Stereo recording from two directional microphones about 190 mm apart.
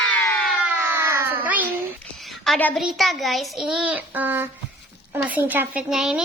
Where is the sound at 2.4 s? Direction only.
5° left (ahead or behind).